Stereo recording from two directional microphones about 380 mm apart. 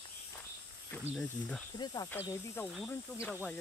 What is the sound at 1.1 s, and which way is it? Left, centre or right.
Speech, centre.